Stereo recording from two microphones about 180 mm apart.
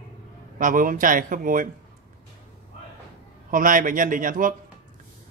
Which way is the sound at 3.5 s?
50° right (ahead or behind).